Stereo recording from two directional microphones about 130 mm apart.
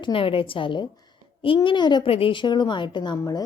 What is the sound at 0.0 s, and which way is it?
A woman's voice, 45° left (ahead or behind).